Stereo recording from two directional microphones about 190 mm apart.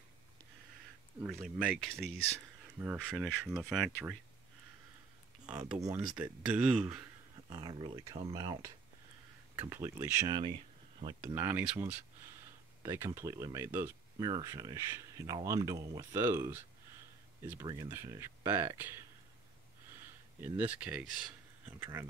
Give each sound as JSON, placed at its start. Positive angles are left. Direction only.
{"t": 1.2, "sound": "speech", "side_deg": -5}
{"t": 2.8, "sound": "speech", "side_deg": -10}
{"t": 5.5, "sound": "speech", "side_deg": -5}
{"t": 5.9, "sound": "speech", "side_deg": -15}
{"t": 7.4, "sound": "speech", "side_deg": -25}
{"t": 11.1, "sound": "speech", "side_deg": -10}
{"t": 17.8, "sound": "speech", "side_deg": -15}
{"t": 20.3, "sound": "speech", "side_deg": -10}